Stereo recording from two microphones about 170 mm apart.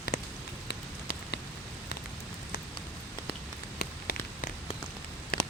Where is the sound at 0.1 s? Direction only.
50° left (ahead or behind).